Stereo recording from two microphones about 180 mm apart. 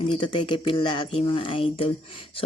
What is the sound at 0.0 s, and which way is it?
Speech, 25° left (ahead or behind).